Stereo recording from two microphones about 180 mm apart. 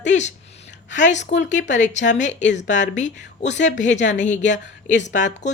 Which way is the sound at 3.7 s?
45° left (ahead or behind).